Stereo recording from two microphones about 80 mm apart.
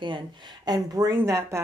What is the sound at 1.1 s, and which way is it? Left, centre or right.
Speech, right.